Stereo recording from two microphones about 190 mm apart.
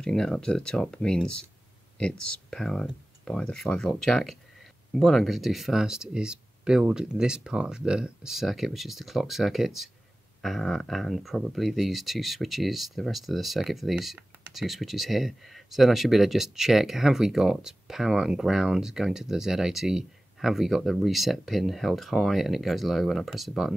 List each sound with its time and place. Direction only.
0.0 s speech: 5° left (ahead or behind)